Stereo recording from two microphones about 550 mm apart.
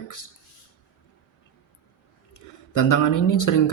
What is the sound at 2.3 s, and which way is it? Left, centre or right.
Speech, left.